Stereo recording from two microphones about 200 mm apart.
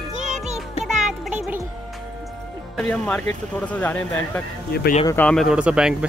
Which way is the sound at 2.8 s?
5° left (ahead or behind).